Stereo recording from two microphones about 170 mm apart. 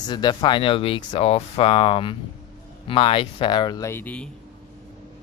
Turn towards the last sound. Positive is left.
turn(degrees=5)  # may be behind; listen again after turning